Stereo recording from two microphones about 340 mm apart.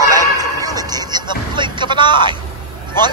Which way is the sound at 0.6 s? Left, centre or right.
Centre.